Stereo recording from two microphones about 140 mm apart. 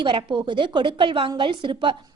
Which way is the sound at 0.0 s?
35° right (ahead or behind).